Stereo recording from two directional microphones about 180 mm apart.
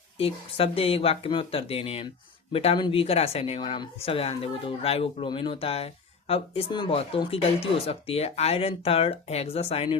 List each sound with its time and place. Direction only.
0.2 s speech: 30° left (ahead or behind)